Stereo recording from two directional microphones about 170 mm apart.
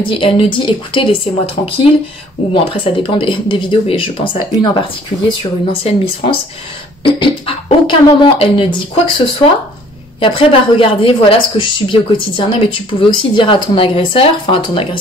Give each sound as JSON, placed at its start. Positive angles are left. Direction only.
{"t": 0.0, "sound": "speech", "side_deg": 30}